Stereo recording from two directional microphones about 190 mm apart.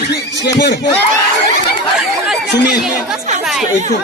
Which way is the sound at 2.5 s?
60° left (ahead or behind).